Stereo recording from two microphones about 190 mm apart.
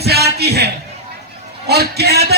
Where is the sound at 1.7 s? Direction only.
60° right (ahead or behind).